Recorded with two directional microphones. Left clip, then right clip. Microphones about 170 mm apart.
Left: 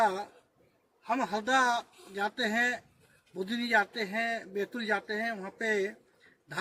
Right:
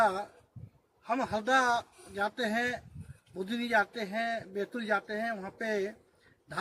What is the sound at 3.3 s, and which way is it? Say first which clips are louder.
Speech: left 1 dB; 20° right (ahead or behind).